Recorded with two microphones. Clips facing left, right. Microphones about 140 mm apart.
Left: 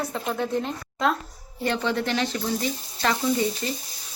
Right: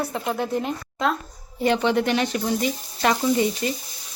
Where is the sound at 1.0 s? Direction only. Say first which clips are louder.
Even; centre (ahead or behind).